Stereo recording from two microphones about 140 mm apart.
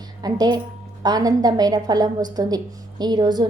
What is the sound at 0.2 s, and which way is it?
A woman's voice, 30° right (ahead or behind).